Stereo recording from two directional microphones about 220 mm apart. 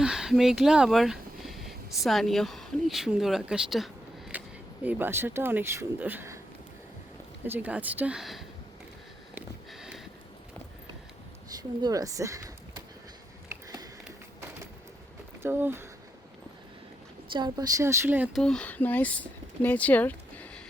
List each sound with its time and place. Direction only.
0.0 s speech: 5° right (ahead or behind)
7.4 s speech: 10° right (ahead or behind)
9.3 s sniff: centre (ahead or behind)
11.5 s speech: 15° right (ahead or behind)
13.5 s a sound: 15° right (ahead or behind)
15.4 s speech: 10° right (ahead or behind)
17.3 s speech: 20° right (ahead or behind)
18.4 s speech: 5° left (ahead or behind)